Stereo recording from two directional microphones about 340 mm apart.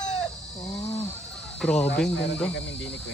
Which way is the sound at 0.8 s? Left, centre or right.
Centre.